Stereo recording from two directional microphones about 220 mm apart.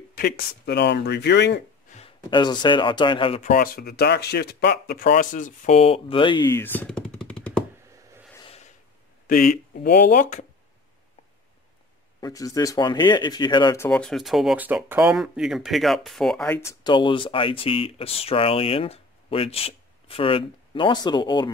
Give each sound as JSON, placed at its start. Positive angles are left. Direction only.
{"t": 0.1, "sound": "speech", "side_deg": 45}
{"t": 1.9, "sound": "speech", "side_deg": 25}
{"t": 3.5, "sound": "speech", "side_deg": 40}
{"t": 8.4, "sound": "snort", "side_deg": 25}
{"t": 9.8, "sound": "speech", "side_deg": 45}
{"t": 12.2, "sound": "speech", "side_deg": 15}